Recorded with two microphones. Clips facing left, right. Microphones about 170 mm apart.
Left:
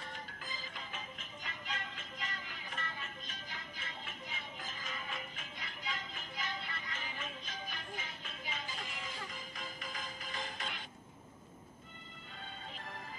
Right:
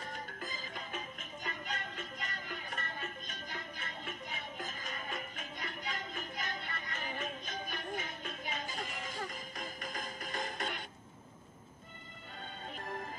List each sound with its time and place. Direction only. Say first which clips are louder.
0.0 s music: right 4 dB; 45° right (ahead or behind)